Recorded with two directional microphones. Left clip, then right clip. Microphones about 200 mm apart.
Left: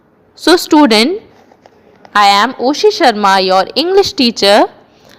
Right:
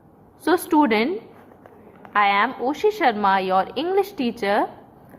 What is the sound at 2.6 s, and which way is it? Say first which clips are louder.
A woman's voice: left 10 dB; 40° left (ahead or behind).